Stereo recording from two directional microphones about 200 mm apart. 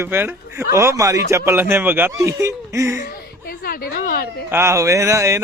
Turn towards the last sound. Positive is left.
turn(degrees=-15)  # may be behind; listen again after turning